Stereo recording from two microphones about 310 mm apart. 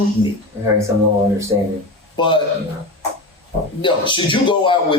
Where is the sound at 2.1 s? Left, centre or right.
Centre.